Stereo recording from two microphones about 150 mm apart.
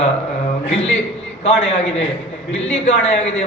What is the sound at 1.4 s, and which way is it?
A man's voice, 45° left (ahead or behind).